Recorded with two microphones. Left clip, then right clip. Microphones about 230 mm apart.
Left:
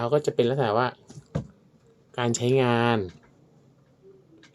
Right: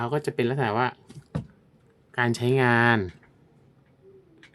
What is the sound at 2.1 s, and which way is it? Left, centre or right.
Speech, right.